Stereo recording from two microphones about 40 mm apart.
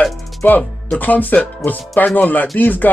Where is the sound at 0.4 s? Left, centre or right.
Left.